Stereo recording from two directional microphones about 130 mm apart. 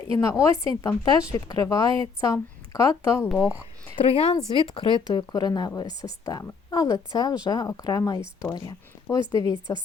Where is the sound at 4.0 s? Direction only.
50° left (ahead or behind); by 9.5 s 25° left (ahead or behind).